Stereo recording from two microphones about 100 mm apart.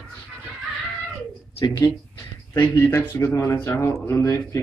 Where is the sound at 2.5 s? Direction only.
20° left (ahead or behind).